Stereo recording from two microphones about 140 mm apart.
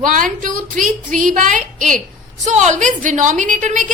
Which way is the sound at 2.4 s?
55° right (ahead or behind).